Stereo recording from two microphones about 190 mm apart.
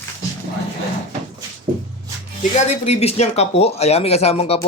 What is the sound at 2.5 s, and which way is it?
Speech, 35° left (ahead or behind).